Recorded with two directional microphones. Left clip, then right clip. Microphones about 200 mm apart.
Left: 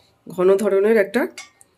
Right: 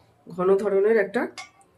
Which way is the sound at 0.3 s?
40° left (ahead or behind).